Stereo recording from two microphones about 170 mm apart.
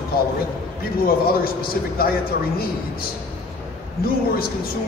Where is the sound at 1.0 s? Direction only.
60° left (ahead or behind).